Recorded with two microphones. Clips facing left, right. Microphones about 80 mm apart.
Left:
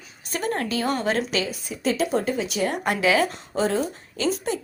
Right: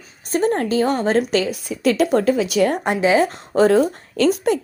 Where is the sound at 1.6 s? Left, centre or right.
Right.